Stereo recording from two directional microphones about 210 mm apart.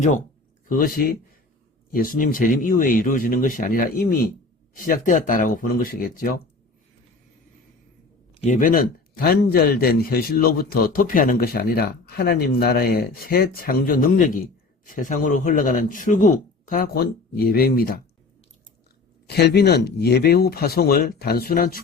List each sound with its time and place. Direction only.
0.7 s speech: 45° left (ahead or behind)
8.4 s speech: 40° left (ahead or behind)
19.3 s speech: 50° left (ahead or behind)